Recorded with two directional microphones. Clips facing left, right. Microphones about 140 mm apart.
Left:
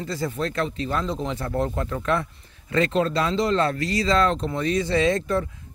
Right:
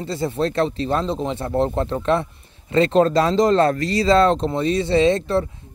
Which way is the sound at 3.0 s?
40° right (ahead or behind).